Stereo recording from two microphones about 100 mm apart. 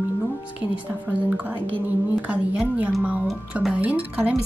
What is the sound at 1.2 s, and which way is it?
A woman's voice, 15° right (ahead or behind).